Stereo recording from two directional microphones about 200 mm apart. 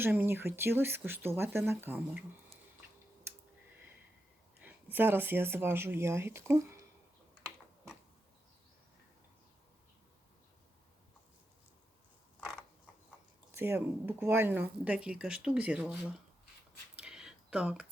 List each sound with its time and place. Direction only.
0.0 s speech: 10° right (ahead or behind)
4.6 s speech: 10° right (ahead or behind)
13.6 s speech: 10° right (ahead or behind)
16.9 s a sound: 5° right (ahead or behind)